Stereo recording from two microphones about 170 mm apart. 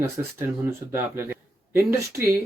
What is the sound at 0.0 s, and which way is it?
Speech, 15° right (ahead or behind).